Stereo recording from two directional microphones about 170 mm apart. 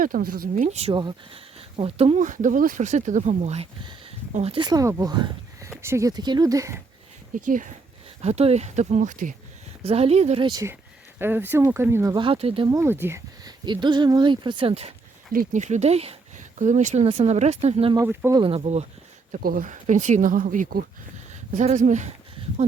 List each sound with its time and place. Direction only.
0.0 s speech: 60° right (ahead or behind); by 0.9 s 40° right (ahead or behind)
0.9 s speech: 30° right (ahead or behind)
7.3 s speech: 50° right (ahead or behind)
8.2 s speech: 40° right (ahead or behind)
9.8 s speech: 35° right (ahead or behind)
10.4 s speech: 20° right (ahead or behind)
12.1 s speech: 30° right (ahead or behind)
12.7 s speech: 15° right (ahead or behind); by 14.9 s 35° right (ahead or behind)
15.3 s speech: 50° right (ahead or behind)
17.9 s speech: 15° right (ahead or behind)
18.3 s speech: 35° right (ahead or behind)
19.3 s speech: 55° right (ahead or behind)